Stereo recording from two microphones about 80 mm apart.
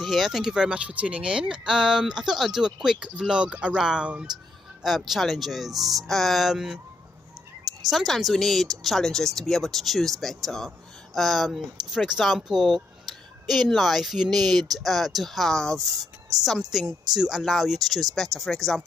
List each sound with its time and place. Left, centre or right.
0.0 s speech: centre
7.9 s speech: centre